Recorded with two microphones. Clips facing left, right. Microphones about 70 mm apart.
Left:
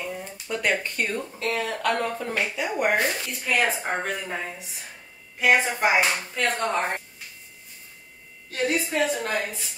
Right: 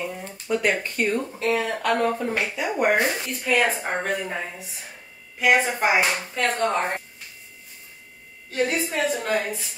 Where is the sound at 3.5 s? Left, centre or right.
Centre.